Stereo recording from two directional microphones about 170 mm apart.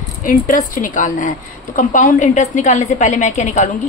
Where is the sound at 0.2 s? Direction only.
50° left (ahead or behind).